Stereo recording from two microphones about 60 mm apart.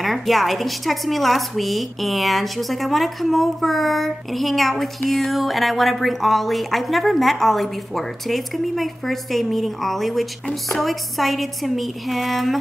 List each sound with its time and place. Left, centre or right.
0.0 s a woman's voice: centre